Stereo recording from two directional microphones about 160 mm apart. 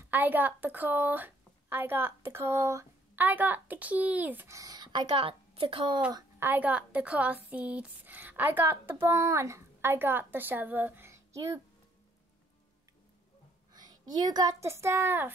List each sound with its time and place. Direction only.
0.0 s a woman's voice: 10° right (ahead or behind); by 6.0 s 30° right (ahead or behind)
6.4 s speech: 10° right (ahead or behind)
13.7 s a woman's voice: 25° right (ahead or behind)